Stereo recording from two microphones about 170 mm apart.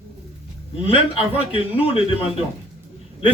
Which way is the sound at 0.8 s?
35° left (ahead or behind).